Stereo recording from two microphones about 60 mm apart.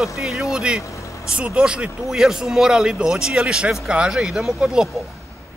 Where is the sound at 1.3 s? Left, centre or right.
Centre.